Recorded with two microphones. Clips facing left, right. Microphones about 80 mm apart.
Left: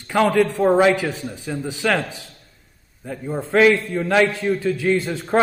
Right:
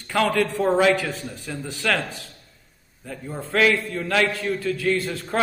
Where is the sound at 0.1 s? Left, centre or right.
Centre.